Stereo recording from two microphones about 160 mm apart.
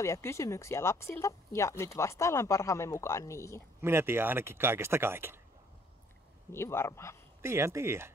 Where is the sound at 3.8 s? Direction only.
15° right (ahead or behind).